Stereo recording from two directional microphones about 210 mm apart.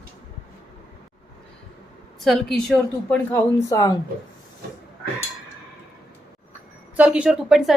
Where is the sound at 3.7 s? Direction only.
15° left (ahead or behind).